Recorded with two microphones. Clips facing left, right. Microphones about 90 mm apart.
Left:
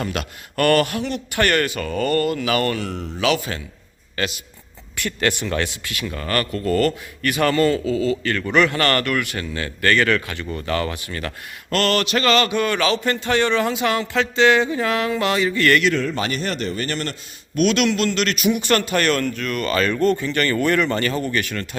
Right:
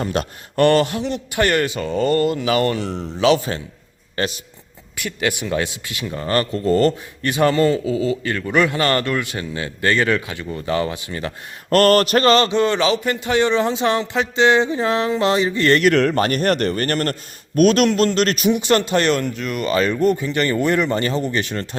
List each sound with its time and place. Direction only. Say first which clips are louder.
0.0 s speech: right 4 dB; 30° right (ahead or behind)
4.9 s speech: even; 10° right (ahead or behind)
11.7 s a sound: right 6 dB; 45° right (ahead or behind); by 13.0 s 25° right (ahead or behind)
13.1 s speech: right 1 dB; 15° right (ahead or behind)
15.8 s a man's voice: right 5 dB; 60° right (ahead or behind); by 18.6 s 35° right (ahead or behind)
18.6 s speech: right 2 dB; 25° right (ahead or behind)